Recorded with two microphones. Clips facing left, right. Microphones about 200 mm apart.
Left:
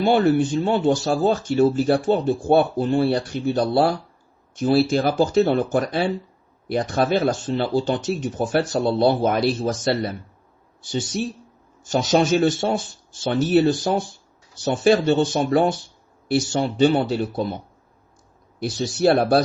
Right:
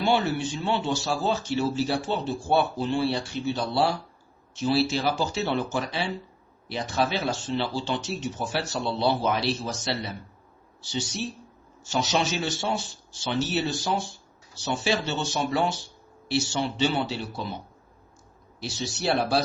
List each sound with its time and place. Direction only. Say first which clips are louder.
0.0 s speech: left 7 dB; 50° left (ahead or behind)
18.6 s speech: left 10 dB; 50° left (ahead or behind)